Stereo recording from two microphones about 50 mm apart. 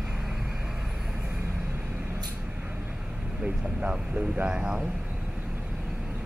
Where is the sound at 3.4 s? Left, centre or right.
Right.